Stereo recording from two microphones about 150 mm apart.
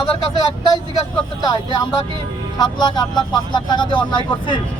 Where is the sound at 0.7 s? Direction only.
30° left (ahead or behind).